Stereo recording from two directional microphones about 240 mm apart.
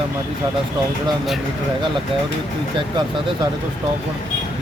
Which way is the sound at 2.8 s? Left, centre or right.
Centre.